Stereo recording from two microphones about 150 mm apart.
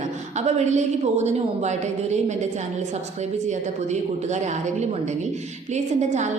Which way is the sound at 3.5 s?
50° right (ahead or behind).